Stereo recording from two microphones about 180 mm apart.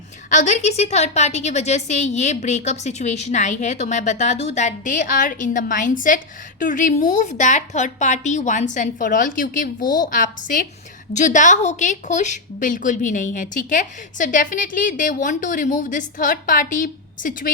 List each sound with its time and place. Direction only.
0.3 s a woman's voice: 40° left (ahead or behind)
9.8 s a woman's voice: 20° left (ahead or behind)
10.1 s a woman's voice: 45° left (ahead or behind)